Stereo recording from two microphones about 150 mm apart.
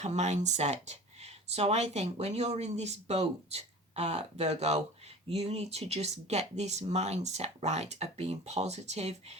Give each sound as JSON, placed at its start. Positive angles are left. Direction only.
{"t": 0.0, "sound": "speech", "side_deg": -50}